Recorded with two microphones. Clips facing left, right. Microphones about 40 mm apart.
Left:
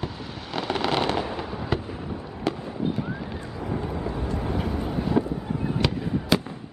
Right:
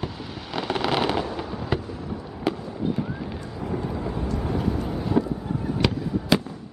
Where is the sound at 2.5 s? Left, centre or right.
Centre.